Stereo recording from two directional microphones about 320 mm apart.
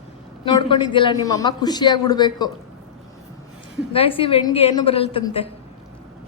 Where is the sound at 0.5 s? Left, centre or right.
Centre.